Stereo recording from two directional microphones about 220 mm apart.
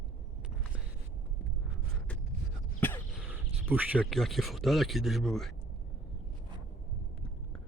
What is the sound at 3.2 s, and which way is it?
Speech, 10° right (ahead or behind).